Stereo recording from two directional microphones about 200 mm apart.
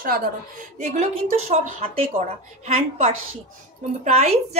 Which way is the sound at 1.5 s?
35° right (ahead or behind).